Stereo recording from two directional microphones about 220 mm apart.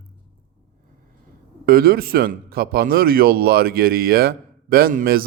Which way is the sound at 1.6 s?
45° right (ahead or behind).